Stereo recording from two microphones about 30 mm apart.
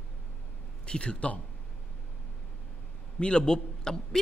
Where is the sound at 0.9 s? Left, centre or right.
Left.